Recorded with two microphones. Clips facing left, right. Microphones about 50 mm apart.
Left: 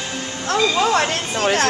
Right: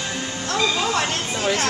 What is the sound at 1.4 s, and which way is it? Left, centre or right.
Chatter, left.